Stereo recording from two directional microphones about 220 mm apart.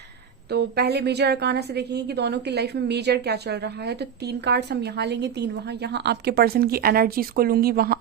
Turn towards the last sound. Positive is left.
turn(degrees=-45)  # may be behind; listen again after turning